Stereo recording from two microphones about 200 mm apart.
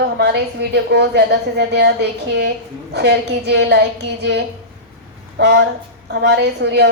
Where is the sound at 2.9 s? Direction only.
55° right (ahead or behind).